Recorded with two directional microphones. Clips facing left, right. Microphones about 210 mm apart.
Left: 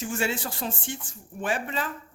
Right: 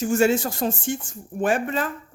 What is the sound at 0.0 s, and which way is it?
Speech, 45° right (ahead or behind).